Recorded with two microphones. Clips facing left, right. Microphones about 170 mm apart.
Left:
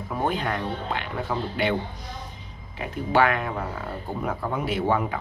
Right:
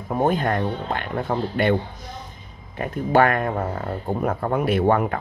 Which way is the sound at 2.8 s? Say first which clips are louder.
Right 4 dB; 50° right (ahead or behind).